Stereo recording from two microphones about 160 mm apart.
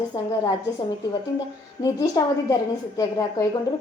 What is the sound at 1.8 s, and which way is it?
Speech, 20° left (ahead or behind).